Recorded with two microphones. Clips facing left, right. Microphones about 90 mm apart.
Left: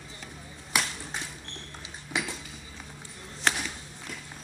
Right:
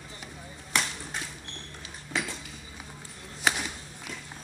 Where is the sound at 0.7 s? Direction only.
5° left (ahead or behind).